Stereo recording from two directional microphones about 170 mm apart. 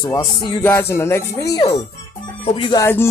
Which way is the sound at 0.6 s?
15° left (ahead or behind).